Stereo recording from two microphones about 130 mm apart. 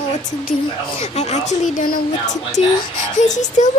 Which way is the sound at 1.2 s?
60° left (ahead or behind).